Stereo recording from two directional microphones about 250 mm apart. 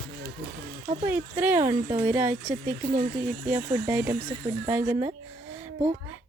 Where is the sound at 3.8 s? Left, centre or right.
Centre.